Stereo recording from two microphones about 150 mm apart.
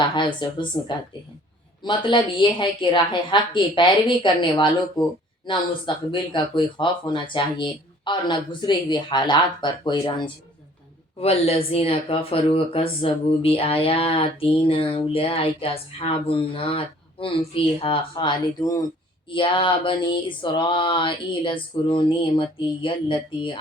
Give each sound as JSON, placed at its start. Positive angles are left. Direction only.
{"t": 0.1, "sound": "speech", "side_deg": 30}
{"t": 11.2, "sound": "speech", "side_deg": 40}